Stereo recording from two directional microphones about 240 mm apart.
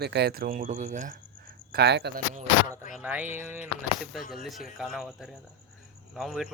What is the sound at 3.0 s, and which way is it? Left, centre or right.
Speech, centre.